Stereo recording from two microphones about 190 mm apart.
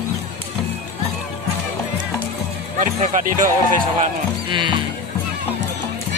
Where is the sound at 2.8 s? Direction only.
40° right (ahead or behind).